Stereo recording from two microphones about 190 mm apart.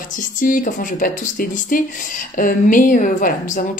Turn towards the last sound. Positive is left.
turn(degrees=45)  # may be behind; listen again after turning